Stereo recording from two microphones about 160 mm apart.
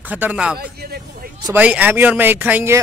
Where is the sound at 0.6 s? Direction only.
75° right (ahead or behind).